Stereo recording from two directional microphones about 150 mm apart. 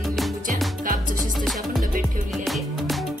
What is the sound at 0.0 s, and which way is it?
Music, centre (ahead or behind).